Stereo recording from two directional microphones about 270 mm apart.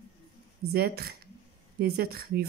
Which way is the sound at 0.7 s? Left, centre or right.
Right.